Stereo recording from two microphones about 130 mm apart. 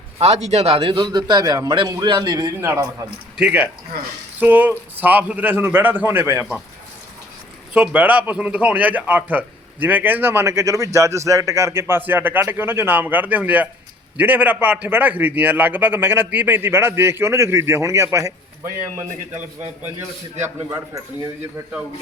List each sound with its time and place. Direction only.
0.2 s a man's voice: 60° right (ahead or behind); by 3.1 s 25° right (ahead or behind)
3.3 s a man's voice: 10° right (ahead or behind)
7.7 s a man's voice: 10° right (ahead or behind)
20.4 s a man's voice: 15° right (ahead or behind)